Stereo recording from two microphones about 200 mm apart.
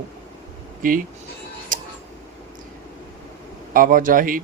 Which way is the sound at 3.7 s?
45° right (ahead or behind).